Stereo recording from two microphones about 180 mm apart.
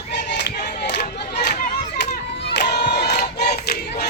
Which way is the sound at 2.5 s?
65° left (ahead or behind).